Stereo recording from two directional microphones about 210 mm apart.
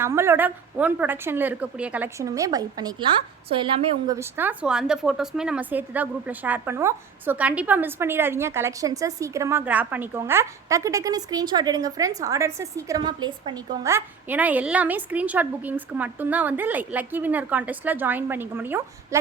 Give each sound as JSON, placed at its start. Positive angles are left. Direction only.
{"t": 0.0, "sound": "a woman's voice", "side_deg": -10}